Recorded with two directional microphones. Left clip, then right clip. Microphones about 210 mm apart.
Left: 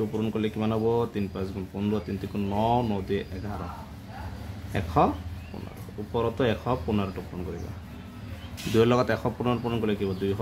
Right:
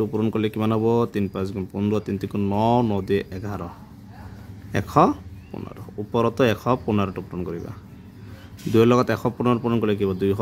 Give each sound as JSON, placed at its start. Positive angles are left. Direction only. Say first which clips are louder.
{"t": 0.1, "sound": "speech", "louder": "right 5 dB", "side_deg": -45}
{"t": 4.7, "sound": "speech", "louder": "right 6 dB", "side_deg": -45}
{"t": 6.1, "sound": "speech", "louder": "right 6 dB", "side_deg": -40}
{"t": 8.7, "sound": "speech", "louder": "right 4 dB", "side_deg": -35}